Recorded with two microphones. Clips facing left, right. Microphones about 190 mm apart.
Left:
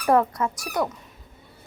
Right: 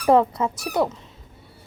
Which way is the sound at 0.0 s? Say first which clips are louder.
Right 3 dB; 25° right (ahead or behind).